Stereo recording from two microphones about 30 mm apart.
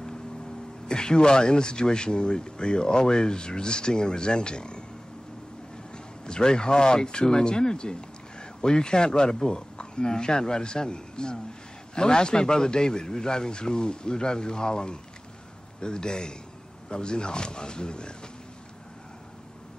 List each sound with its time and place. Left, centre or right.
0.8 s speech: left
6.2 s speech: left